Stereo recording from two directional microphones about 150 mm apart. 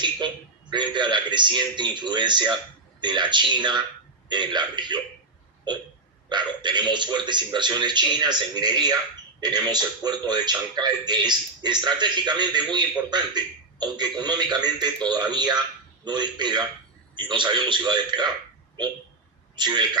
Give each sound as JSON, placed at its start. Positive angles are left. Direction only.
{"t": 0.2, "sound": "a man's voice", "side_deg": -30}
{"t": 19.5, "sound": "a man's voice", "side_deg": -30}